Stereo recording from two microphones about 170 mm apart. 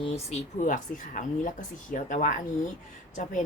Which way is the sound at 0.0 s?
40° left (ahead or behind).